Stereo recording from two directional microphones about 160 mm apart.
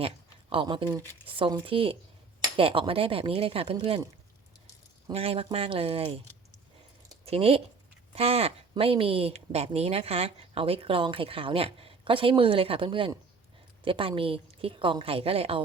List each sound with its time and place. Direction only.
0.5 s speech: 30° right (ahead or behind)
5.1 s speech: 40° right (ahead or behind)
7.3 s speech: 40° right (ahead or behind)